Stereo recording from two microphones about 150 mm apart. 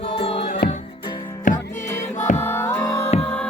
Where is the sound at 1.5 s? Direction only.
60° left (ahead or behind).